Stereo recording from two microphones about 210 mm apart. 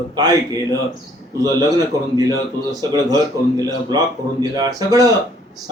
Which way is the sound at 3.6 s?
15° right (ahead or behind).